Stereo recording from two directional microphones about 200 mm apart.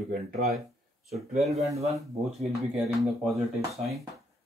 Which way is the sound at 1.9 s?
Centre (ahead or behind).